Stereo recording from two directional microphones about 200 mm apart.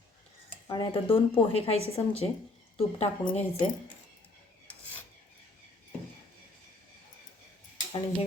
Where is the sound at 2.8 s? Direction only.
30° left (ahead or behind).